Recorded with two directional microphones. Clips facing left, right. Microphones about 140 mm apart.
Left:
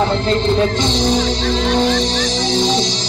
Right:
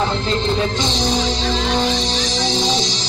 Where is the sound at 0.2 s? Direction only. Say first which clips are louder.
Left 4 dB; 50° left (ahead or behind).